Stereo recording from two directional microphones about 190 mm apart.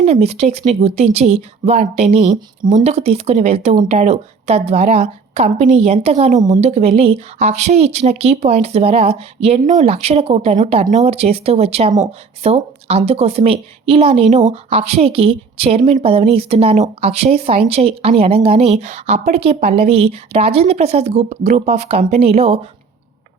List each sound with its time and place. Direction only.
0.0 s speech: 35° right (ahead or behind)